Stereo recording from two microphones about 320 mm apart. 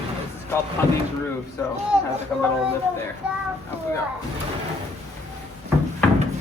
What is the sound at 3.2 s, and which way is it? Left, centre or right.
Child singing, centre.